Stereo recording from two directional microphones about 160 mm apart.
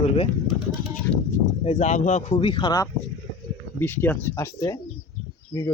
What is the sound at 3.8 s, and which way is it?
Speech, 15° left (ahead or behind).